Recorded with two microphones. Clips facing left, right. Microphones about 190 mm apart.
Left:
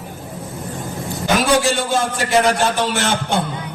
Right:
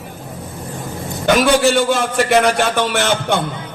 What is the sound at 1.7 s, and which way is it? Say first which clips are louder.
A man's voice: right 4 dB; 65° right (ahead or behind).